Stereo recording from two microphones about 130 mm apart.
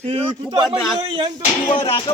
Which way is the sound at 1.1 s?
35° right (ahead or behind).